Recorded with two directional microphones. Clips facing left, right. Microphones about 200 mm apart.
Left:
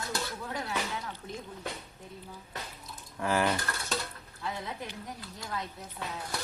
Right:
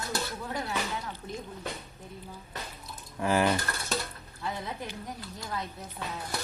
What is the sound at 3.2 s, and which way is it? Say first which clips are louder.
Speech: right 3 dB; 15° right (ahead or behind).